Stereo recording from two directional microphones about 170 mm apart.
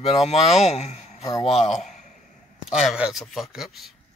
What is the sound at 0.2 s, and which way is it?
Speech, 40° left (ahead or behind).